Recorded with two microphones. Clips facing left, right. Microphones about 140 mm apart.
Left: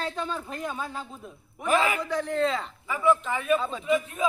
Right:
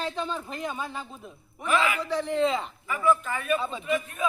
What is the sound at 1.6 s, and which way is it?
Speech, 45° left (ahead or behind).